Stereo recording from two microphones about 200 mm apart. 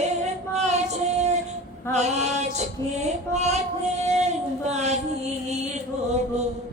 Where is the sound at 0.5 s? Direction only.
35° right (ahead or behind).